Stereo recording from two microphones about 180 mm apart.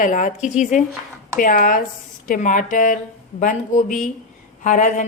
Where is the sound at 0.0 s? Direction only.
45° left (ahead or behind).